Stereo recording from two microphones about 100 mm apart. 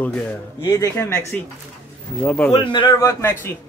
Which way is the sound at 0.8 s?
30° left (ahead or behind).